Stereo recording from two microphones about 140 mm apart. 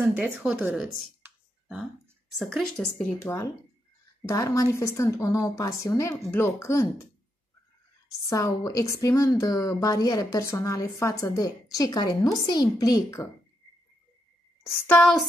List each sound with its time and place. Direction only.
0.0 s speech: 10° right (ahead or behind)
1.2 s a sound: 15° right (ahead or behind)
2.3 s a woman's voice: centre (ahead or behind)
3.2 s a woman's voice: 20° left (ahead or behind)
8.3 s a woman's voice: 20° left (ahead or behind)
15.0 s a woman's voice: centre (ahead or behind)